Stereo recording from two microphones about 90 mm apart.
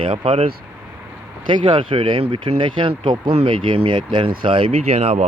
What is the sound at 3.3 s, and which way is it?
Speech, 80° right.